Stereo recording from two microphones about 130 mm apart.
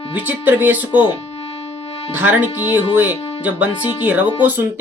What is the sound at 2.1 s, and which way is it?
Speech, 10° right (ahead or behind).